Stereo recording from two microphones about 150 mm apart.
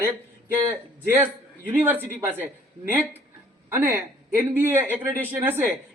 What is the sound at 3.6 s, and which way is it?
Speech, 15° right (ahead or behind).